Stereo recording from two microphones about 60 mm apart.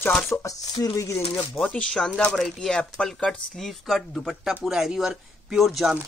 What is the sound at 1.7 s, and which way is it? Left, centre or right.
Speech, centre.